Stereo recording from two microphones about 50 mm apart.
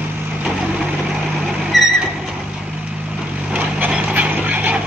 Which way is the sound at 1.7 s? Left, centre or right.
Centre.